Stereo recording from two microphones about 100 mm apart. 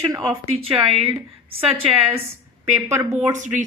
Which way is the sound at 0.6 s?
75° right (ahead or behind).